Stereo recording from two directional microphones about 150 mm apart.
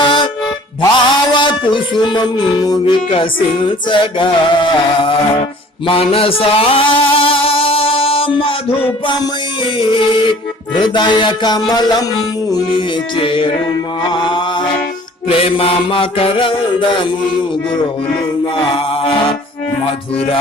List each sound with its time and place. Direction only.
0.0 s music: 35° left (ahead or behind)
2.6 s mantra: 35° left (ahead or behind)
5.8 s mantra: 40° left (ahead or behind)
10.8 s music: 30° left (ahead or behind)
13.1 s mantra: 35° left (ahead or behind)
14.1 s music: 30° left (ahead or behind)
15.3 s mantra: 40° left (ahead or behind)